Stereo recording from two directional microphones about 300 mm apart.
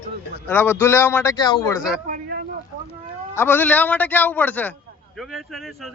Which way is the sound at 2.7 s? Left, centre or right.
Right.